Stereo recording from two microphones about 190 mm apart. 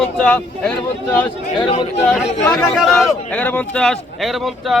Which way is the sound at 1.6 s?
30° left (ahead or behind).